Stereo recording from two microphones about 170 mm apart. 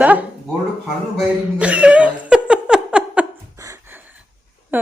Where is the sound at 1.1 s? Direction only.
5° right (ahead or behind).